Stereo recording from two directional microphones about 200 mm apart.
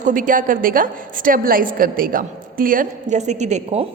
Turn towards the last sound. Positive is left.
turn(degrees=-35)  # may be behind; listen again after turning